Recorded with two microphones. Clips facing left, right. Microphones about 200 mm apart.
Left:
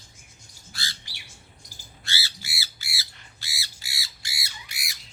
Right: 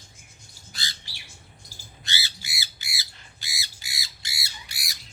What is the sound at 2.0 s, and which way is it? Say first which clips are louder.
Squawk: even; 20° right (ahead or behind).